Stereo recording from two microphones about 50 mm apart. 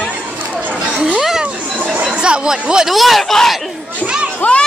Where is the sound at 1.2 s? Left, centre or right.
Centre.